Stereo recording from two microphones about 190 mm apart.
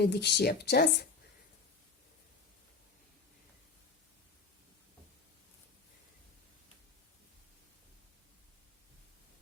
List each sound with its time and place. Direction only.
0.0 s speech: 60° left (ahead or behind)